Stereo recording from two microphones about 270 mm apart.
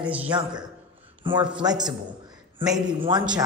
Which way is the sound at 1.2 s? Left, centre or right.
Centre.